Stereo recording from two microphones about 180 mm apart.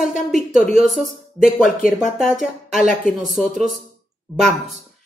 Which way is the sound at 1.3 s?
Centre (ahead or behind).